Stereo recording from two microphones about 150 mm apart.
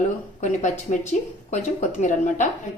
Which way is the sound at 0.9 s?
50° left (ahead or behind).